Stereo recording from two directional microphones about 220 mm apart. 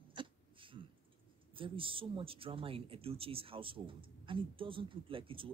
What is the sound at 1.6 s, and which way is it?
A woman's voice, 25° right (ahead or behind).